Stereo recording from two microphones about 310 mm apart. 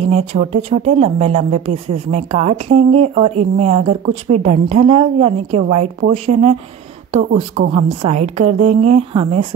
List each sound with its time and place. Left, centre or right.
0.0 s speech: centre